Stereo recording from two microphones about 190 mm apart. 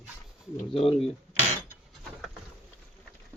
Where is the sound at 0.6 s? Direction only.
30° left (ahead or behind).